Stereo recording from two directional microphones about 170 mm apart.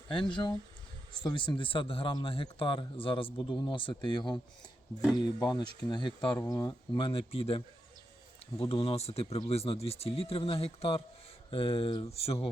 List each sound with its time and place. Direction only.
0.1 s a man's voice: 30° left (ahead or behind)
8.7 s speech: 35° left (ahead or behind)